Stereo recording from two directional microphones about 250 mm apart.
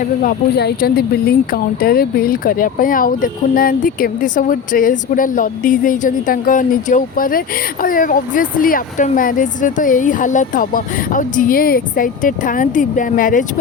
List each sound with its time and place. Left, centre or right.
0.0 s speech: left